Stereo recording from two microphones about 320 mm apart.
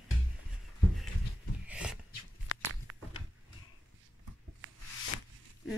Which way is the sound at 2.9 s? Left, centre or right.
Right.